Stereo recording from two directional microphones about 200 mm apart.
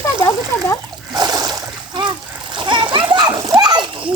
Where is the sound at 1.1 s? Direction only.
20° right (ahead or behind).